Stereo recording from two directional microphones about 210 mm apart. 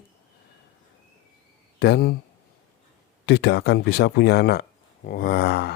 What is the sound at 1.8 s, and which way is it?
Speech, 50° left (ahead or behind).